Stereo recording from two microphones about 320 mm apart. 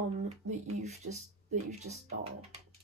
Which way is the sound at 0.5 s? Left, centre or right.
Right.